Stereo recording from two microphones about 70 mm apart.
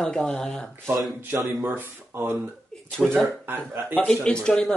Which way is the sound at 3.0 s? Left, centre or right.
Centre.